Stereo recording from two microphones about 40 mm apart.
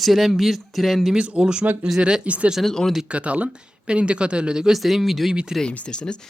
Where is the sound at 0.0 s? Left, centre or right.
Centre.